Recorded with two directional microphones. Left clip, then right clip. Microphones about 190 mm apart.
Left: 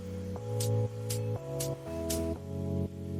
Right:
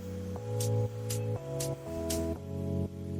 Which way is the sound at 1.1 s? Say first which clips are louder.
Even; 5° right (ahead or behind).